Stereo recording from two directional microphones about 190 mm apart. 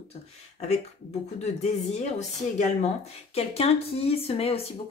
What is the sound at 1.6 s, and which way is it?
Speech, 35° left (ahead or behind).